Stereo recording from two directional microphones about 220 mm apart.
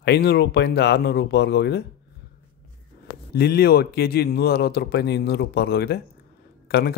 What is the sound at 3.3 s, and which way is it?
A man's voice, 45° left (ahead or behind).